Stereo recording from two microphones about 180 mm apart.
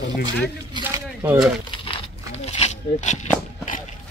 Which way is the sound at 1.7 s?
30° left (ahead or behind).